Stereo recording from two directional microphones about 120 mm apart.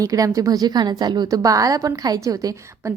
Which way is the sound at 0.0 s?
30° right (ahead or behind).